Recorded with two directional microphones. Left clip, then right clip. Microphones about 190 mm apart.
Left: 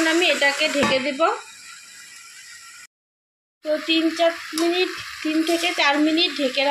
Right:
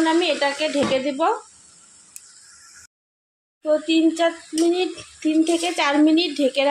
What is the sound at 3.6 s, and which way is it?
Speech, 10° right (ahead or behind).